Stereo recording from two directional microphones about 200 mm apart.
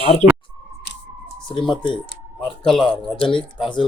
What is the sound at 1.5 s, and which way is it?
Speech, 25° left (ahead or behind).